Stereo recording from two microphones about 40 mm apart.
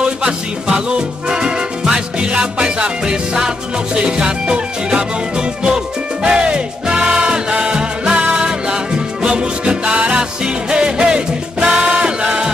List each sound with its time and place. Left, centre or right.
0.7 s music: right
6.2 s music: right